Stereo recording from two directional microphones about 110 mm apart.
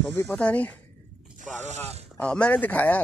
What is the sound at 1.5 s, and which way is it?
Speech, 90° right.